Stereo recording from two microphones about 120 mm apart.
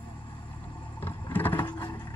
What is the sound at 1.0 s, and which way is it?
Vehicle, 15° left (ahead or behind).